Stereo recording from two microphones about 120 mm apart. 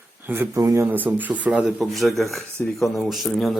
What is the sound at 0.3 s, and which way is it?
Speech, 25° right (ahead or behind).